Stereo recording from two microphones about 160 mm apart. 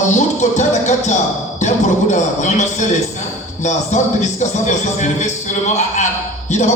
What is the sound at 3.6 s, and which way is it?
Music, 45° left (ahead or behind).